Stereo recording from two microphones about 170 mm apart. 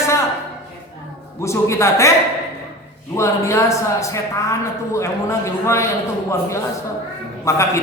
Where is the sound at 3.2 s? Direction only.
15° left (ahead or behind).